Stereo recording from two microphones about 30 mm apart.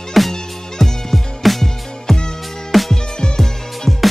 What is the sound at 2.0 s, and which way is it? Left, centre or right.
Music, left.